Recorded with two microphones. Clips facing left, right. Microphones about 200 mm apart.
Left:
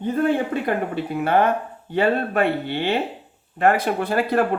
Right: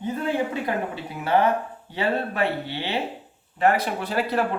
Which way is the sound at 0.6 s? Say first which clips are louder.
Left 4 dB; 55° left (ahead or behind).